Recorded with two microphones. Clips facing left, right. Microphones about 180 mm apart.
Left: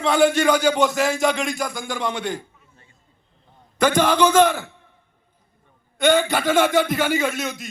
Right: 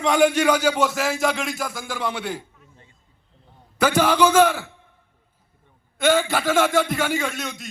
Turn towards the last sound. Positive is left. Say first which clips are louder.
# left 4 dB
turn(degrees=0)  # may be behind; listen again after turning